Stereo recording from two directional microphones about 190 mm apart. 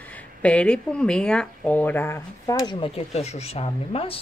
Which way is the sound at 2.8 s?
35° left (ahead or behind).